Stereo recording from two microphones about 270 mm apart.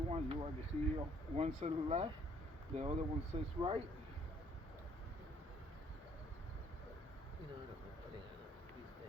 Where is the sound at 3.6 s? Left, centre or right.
Right.